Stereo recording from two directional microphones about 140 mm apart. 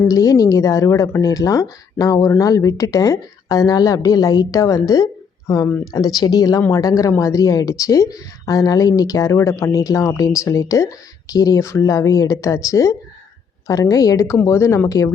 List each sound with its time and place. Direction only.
0.1 s speech: 25° left (ahead or behind)